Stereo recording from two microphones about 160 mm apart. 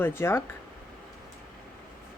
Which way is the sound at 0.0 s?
15° left (ahead or behind).